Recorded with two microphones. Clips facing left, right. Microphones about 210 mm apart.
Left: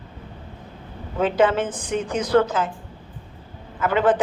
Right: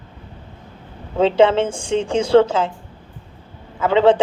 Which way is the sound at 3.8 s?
25° right (ahead or behind).